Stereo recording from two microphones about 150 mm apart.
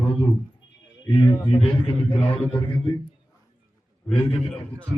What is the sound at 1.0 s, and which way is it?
Speech, 30° left (ahead or behind).